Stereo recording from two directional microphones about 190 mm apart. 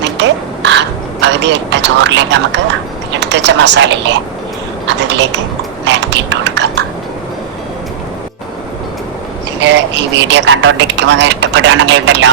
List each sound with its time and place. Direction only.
0.0 s a sound: 70° right (ahead or behind)
3.1 s speech: 65° right (ahead or behind)
9.6 s speech: 65° right (ahead or behind)